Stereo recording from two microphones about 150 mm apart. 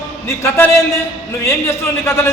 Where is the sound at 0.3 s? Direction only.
15° left (ahead or behind).